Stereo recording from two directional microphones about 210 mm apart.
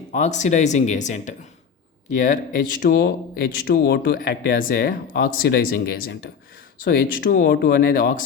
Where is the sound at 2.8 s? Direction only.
45° left (ahead or behind).